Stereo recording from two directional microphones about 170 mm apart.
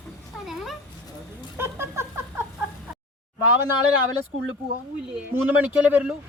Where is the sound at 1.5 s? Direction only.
15° right (ahead or behind).